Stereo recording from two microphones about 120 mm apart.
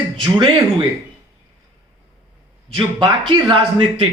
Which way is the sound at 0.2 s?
40° right (ahead or behind).